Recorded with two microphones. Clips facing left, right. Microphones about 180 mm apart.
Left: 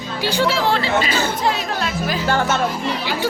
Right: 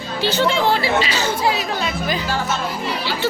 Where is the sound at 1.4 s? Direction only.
5° right (ahead or behind).